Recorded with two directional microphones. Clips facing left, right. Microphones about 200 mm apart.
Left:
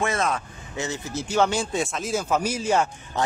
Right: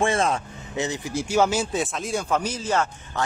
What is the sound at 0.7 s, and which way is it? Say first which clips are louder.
Speech: right 3 dB; 15° right (ahead or behind).